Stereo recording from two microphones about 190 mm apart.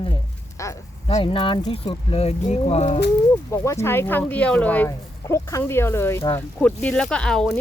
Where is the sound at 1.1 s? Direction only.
25° left (ahead or behind).